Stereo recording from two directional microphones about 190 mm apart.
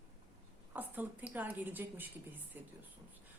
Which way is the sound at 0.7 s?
10° right (ahead or behind).